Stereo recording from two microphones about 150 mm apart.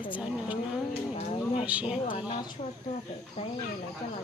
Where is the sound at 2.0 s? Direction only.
30° left (ahead or behind).